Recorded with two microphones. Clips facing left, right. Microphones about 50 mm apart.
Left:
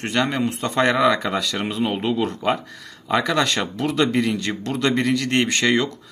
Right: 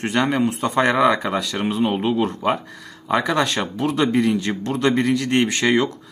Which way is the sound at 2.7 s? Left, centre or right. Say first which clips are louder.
Right 1 dB; centre.